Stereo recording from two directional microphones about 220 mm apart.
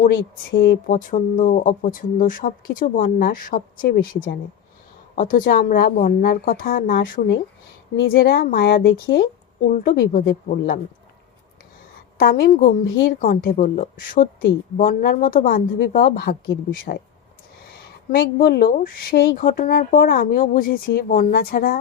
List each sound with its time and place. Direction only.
0.6 s a woman's voice: 40° left (ahead or behind)
12.1 s a woman's voice: 45° left (ahead or behind)
18.2 s a woman's voice: 45° left (ahead or behind)